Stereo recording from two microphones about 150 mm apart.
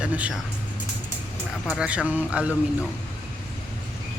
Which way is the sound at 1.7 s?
5° right (ahead or behind).